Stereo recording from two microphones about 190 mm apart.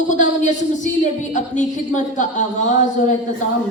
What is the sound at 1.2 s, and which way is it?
A woman's voice, 40° left (ahead or behind).